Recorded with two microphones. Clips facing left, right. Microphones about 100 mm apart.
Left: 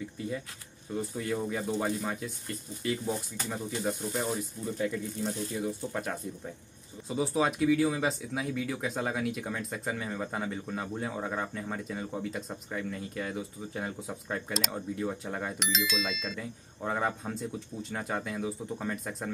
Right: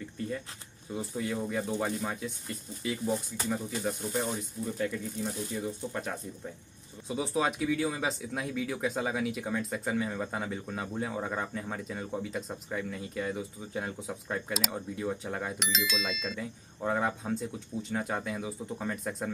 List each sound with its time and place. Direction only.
0.9 s speech: centre (ahead or behind)